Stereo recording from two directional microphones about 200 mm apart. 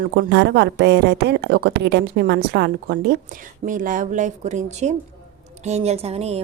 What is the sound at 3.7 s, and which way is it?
Speech, 40° right (ahead or behind).